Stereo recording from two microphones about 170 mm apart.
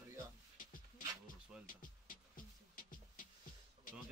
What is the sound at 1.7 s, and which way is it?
Music, 55° left (ahead or behind).